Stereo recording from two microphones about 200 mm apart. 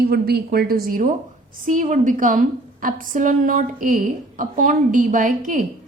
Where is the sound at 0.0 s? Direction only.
50° right (ahead or behind).